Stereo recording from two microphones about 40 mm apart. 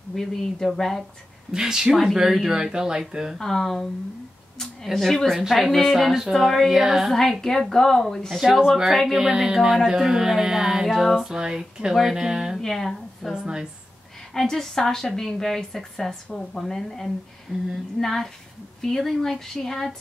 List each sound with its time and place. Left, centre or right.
0.1 s a woman's voice: centre
1.5 s speech: centre
3.3 s a woman's voice: centre
4.9 s speech: centre
6.8 s speech: centre
7.1 s a woman's voice: centre
8.3 s speech: centre
10.9 s speech: centre
11.2 s speech: centre
12.5 s speech: centre
13.3 s speech: centre
14.3 s a woman's voice: centre